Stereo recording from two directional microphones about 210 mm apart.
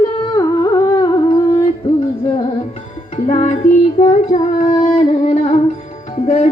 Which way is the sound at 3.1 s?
30° left (ahead or behind).